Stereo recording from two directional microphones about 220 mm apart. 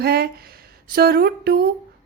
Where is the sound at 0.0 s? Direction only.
45° right (ahead or behind).